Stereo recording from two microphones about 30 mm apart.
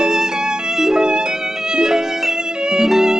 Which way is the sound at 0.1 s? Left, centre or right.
Centre.